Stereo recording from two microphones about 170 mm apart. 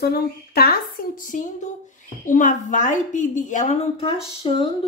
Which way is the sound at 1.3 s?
50° left (ahead or behind).